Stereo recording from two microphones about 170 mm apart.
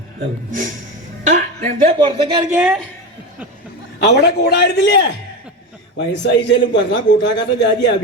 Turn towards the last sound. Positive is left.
turn(degrees=90)